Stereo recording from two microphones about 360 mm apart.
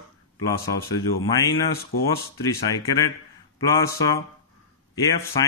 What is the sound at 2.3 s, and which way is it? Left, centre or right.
Speech, centre.